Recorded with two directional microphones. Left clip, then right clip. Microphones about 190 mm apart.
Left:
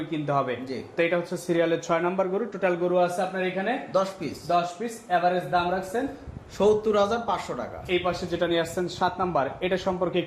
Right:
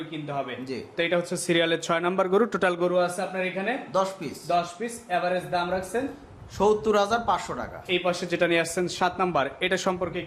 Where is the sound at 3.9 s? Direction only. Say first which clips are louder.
Even; 15° right (ahead or behind).